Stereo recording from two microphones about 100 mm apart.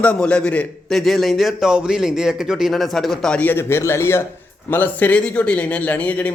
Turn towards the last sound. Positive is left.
turn(degrees=15)  # may be behind; listen again after turning